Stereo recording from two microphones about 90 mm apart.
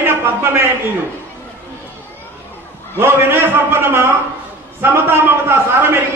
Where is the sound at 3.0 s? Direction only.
25° right (ahead or behind).